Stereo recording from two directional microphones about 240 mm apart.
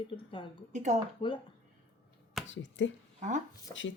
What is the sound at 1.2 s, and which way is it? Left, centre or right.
Speech, centre.